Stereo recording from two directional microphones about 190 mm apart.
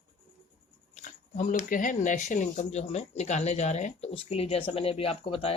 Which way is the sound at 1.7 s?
45° left (ahead or behind).